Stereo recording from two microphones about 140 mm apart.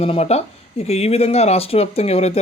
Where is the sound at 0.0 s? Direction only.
45° left (ahead or behind).